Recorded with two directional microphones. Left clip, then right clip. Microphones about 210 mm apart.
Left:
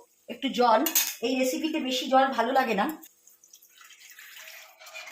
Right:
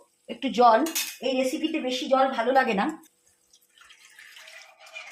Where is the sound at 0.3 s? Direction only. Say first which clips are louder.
Right 4 dB; 35° right (ahead or behind).